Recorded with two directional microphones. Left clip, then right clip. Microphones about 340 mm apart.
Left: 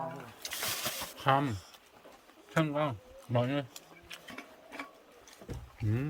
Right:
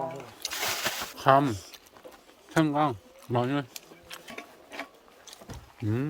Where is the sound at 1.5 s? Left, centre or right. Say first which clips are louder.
Right 8 dB; right.